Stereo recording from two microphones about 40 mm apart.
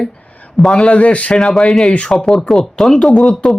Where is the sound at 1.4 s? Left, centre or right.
Centre.